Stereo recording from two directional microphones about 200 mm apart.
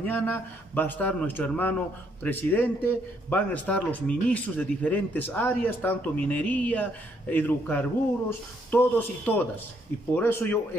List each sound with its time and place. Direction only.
0.0 s a man's voice: 10° left (ahead or behind)